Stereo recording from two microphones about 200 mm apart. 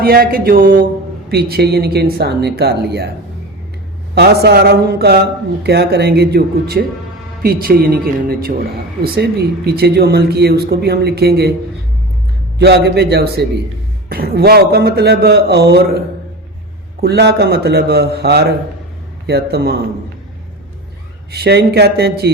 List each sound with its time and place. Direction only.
0.0 s speech: 50° right (ahead or behind)
4.1 s speech: 55° right (ahead or behind)
12.5 s a man's voice: 55° right (ahead or behind)
21.3 s speech: 55° right (ahead or behind)